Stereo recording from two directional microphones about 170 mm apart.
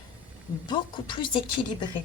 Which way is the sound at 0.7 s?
30° left (ahead or behind).